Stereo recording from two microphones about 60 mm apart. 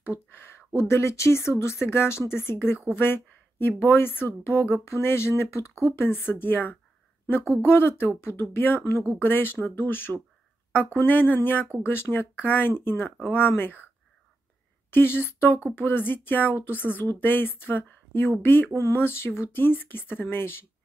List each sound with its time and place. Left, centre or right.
0.0 s speech: left
0.7 s speech: left
5.9 s speech: left
14.9 s speech: left
18.8 s speech: left